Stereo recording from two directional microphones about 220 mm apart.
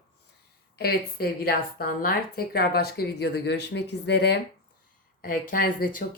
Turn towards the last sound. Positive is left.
turn(degrees=40)  # may be behind; listen again after turning